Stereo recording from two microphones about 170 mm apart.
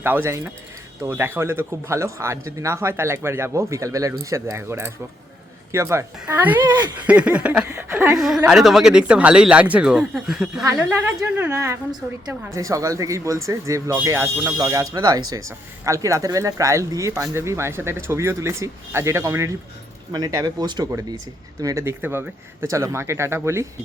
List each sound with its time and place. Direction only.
0.0 s speech: 15° right (ahead or behind)
7.1 s a sound: 5° right (ahead or behind)
8.1 s speech: centre (ahead or behind)